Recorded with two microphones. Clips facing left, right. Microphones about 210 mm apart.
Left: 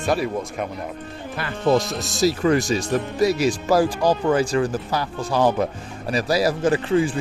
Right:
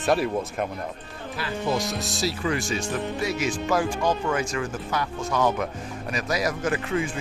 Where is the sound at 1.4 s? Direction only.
55° left (ahead or behind).